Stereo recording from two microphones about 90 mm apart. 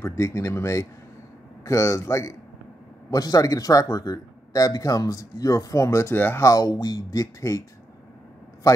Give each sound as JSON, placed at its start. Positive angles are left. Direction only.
{"t": 0.0, "sound": "speech", "side_deg": 30}
{"t": 6.4, "sound": "speech", "side_deg": 40}
{"t": 8.6, "sound": "a man's voice", "side_deg": 40}